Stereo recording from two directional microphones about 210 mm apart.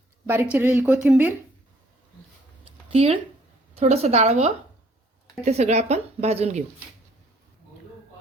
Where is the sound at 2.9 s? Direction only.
30° right (ahead or behind).